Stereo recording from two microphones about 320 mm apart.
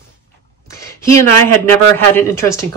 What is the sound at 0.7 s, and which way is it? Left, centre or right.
A woman's voice, centre.